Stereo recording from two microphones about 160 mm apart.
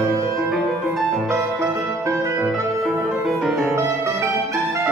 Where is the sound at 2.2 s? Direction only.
15° right (ahead or behind).